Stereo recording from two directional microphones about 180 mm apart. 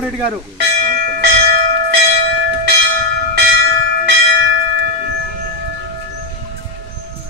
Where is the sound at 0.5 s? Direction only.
60° right (ahead or behind).